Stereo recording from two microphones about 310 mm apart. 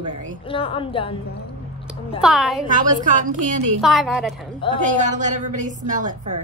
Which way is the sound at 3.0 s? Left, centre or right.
Right.